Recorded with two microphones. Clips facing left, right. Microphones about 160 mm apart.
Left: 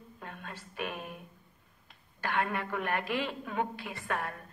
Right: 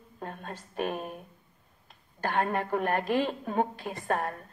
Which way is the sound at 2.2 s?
40° right (ahead or behind).